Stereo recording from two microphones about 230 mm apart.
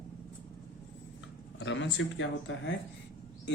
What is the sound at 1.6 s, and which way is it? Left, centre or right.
Speech, left.